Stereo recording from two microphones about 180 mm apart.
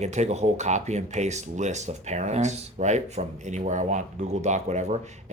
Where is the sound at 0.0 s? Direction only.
40° right (ahead or behind).